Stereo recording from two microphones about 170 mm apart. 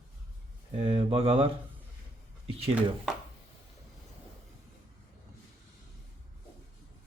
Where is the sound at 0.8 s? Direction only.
35° right (ahead or behind).